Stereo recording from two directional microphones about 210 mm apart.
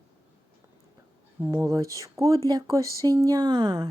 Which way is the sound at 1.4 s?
10° right (ahead or behind).